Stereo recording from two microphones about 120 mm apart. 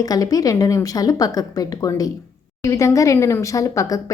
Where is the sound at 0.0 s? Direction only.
30° left (ahead or behind).